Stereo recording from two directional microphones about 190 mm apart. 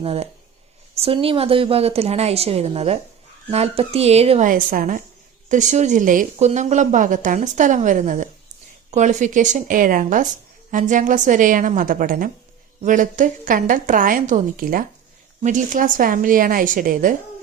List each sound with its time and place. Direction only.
0.0 s a woman's voice: 30° right (ahead or behind)